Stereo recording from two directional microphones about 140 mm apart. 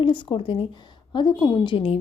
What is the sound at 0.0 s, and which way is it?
A woman's voice, 35° left (ahead or behind).